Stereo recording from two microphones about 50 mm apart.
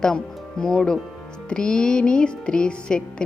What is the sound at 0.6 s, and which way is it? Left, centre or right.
Music, centre.